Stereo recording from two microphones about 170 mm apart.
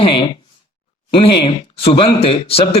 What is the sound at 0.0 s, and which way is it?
Speech, 30° left (ahead or behind).